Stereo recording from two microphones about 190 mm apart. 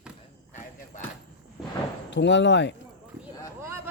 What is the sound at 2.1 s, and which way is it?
Speech, 70° left (ahead or behind).